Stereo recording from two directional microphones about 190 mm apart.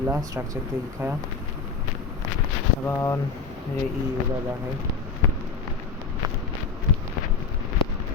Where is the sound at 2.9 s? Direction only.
15° left (ahead or behind).